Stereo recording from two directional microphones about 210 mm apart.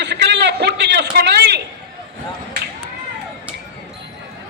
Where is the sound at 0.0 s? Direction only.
55° right (ahead or behind).